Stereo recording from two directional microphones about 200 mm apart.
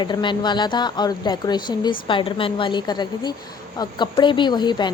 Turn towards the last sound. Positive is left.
turn(degrees=20)  # may be behind; listen again after turning